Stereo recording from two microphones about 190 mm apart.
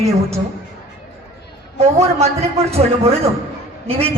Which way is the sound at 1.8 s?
35° right (ahead or behind).